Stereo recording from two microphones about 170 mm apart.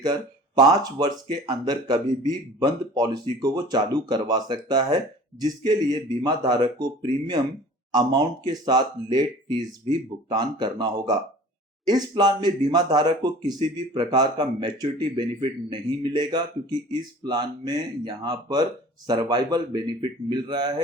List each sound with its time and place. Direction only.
0.0 s speech: 25° right (ahead or behind)